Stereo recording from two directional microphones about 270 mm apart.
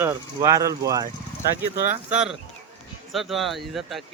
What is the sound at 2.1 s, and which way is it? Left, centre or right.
Speech, centre.